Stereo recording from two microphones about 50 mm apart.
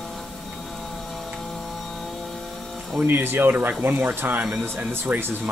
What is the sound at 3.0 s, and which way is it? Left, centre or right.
Speech, right.